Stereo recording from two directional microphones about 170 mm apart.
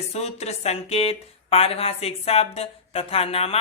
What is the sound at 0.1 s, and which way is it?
Speech, 40° left (ahead or behind).